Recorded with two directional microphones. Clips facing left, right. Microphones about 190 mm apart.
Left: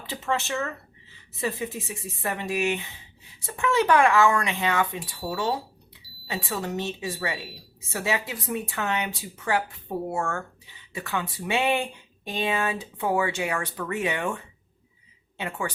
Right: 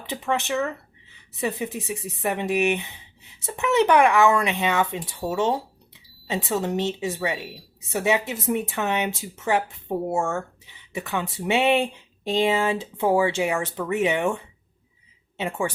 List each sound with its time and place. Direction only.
0.0 s speech: 15° right (ahead or behind)